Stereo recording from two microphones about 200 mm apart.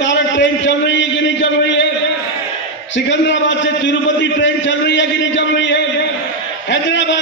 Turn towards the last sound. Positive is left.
turn(degrees=65)  # may be behind; listen again after turning